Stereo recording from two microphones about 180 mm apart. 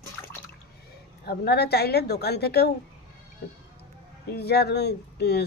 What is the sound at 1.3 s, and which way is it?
A woman's voice, 65° left (ahead or behind).